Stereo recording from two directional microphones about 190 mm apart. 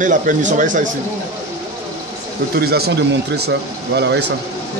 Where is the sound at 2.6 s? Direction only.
55° right (ahead or behind).